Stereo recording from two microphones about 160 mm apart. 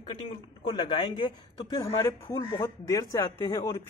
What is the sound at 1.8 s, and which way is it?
Speech, 15° left (ahead or behind).